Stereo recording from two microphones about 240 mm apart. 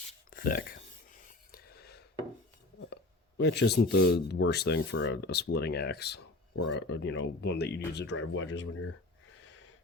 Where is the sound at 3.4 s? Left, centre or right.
Left.